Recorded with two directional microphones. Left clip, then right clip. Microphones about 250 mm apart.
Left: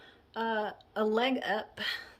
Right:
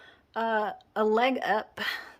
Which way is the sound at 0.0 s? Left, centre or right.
Centre.